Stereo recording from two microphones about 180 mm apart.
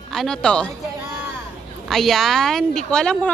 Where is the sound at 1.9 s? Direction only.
Centre (ahead or behind).